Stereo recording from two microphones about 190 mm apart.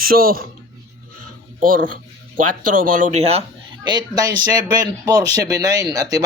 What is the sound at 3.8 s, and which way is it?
Speech, 20° right (ahead or behind).